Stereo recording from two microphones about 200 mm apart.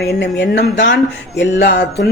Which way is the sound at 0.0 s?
55° left (ahead or behind).